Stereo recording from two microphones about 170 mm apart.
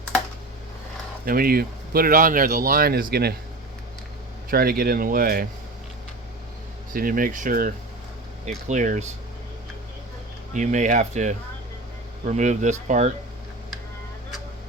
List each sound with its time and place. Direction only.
1.2 s speech: 60° right (ahead or behind)
4.5 s speech: 60° right (ahead or behind)
6.9 s speech: 55° right (ahead or behind)
10.5 s speech: 45° right (ahead or behind)